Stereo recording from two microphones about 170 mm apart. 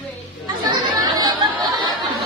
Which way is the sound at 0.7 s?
25° right (ahead or behind).